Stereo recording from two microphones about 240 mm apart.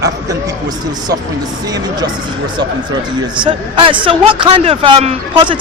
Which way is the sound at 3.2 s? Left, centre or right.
Centre.